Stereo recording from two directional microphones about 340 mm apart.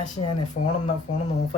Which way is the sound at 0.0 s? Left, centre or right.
Left.